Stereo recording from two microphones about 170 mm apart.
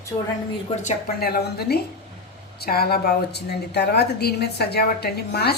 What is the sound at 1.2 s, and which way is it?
A woman's voice, 65° left (ahead or behind).